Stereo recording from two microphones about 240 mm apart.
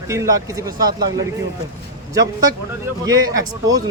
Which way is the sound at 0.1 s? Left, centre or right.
Centre.